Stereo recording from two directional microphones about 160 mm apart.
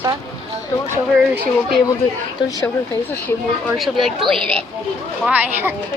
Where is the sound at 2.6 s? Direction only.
10° left (ahead or behind).